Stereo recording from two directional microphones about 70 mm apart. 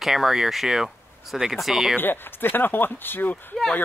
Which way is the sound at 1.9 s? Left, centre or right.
Left.